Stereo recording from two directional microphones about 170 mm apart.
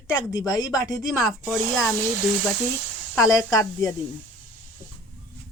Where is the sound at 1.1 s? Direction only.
Centre (ahead or behind).